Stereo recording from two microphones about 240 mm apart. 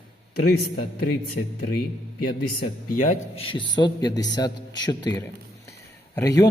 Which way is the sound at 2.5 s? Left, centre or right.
Left.